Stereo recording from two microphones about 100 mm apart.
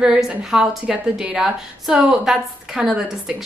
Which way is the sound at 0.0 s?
10° right (ahead or behind).